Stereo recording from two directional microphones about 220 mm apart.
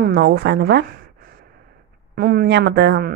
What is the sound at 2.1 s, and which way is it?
Speech, 45° right (ahead or behind).